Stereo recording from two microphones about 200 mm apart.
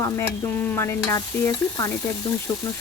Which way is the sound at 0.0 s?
10° left (ahead or behind).